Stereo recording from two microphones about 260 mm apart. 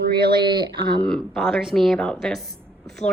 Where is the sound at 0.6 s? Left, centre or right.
Centre.